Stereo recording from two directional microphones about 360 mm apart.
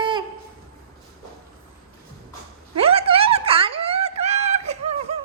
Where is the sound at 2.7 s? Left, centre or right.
Centre.